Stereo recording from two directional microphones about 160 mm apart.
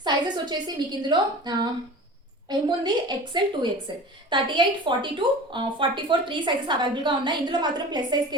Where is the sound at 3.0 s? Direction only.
25° right (ahead or behind).